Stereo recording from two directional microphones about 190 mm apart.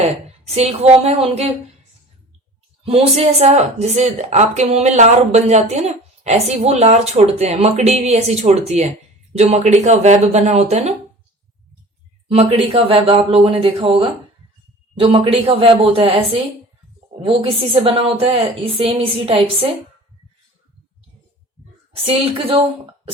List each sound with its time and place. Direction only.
0.0 s a woman's voice: 35° right (ahead or behind)
2.8 s a woman's voice: 30° right (ahead or behind)
12.3 s a woman's voice: 30° right (ahead or behind)
21.9 s a woman's voice: 30° right (ahead or behind)